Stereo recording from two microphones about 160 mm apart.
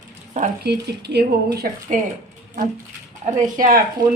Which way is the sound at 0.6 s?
90° right.